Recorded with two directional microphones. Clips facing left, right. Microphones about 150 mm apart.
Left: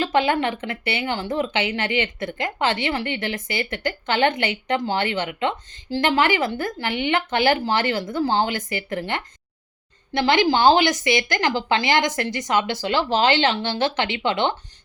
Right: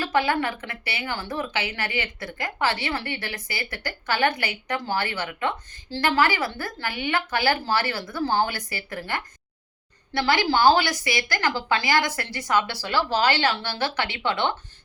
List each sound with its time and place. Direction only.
0.0 s speech: 20° left (ahead or behind)